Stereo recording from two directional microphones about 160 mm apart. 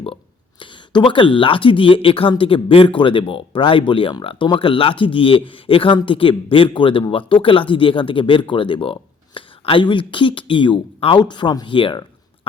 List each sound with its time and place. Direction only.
0.6 s speech: 30° left (ahead or behind)